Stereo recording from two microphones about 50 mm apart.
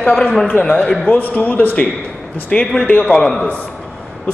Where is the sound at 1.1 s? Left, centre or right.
Left.